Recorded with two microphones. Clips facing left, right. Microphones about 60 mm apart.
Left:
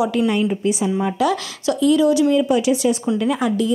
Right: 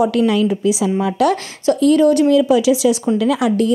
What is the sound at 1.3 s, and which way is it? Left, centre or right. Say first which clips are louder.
Speech: right 4 dB; right.